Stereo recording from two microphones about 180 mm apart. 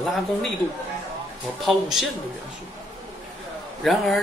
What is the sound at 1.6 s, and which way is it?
Speech, centre (ahead or behind).